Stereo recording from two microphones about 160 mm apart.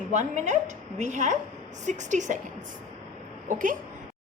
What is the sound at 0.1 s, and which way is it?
A woman's voice, 45° right (ahead or behind).